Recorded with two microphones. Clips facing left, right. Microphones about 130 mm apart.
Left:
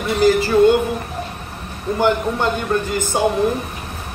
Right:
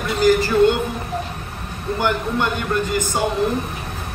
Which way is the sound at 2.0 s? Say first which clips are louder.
Left 3 dB; 20° left (ahead or behind).